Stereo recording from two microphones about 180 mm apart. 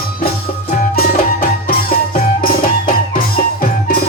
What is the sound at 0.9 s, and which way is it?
Music, 55° left (ahead or behind).